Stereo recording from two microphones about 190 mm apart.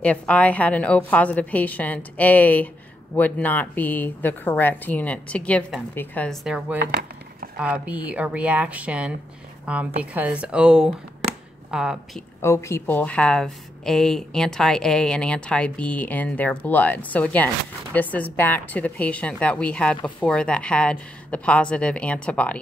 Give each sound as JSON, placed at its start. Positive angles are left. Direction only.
{"t": 0.0, "sound": "speech", "side_deg": 5}
{"t": 6.4, "sound": "a woman's voice", "side_deg": -5}
{"t": 6.8, "sound": "a sound", "side_deg": -50}
{"t": 7.5, "sound": "a woman's voice", "side_deg": -5}
{"t": 12.4, "sound": "a woman's voice", "side_deg": 15}